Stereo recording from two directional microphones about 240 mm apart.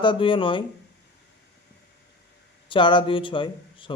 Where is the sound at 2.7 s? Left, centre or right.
Centre.